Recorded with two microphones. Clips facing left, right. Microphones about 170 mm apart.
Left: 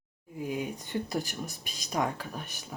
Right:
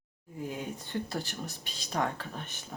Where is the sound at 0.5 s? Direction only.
10° left (ahead or behind).